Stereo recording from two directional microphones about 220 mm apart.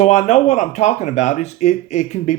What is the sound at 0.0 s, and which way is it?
A man's voice, 30° left (ahead or behind).